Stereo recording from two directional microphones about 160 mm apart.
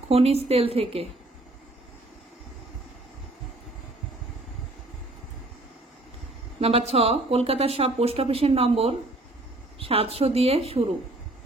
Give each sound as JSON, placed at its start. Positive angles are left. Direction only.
{"t": 0.1, "sound": "speech", "side_deg": -40}
{"t": 6.6, "sound": "speech", "side_deg": -40}